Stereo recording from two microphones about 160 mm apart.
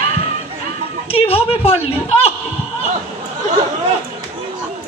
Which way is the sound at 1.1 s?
35° left (ahead or behind).